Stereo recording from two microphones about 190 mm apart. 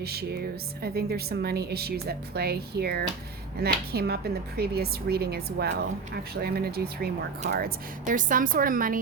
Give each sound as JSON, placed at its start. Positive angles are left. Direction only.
{"t": 0.0, "sound": "a woman's voice", "side_deg": -55}